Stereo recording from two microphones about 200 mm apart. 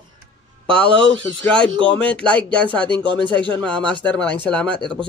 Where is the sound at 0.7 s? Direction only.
25° right (ahead or behind).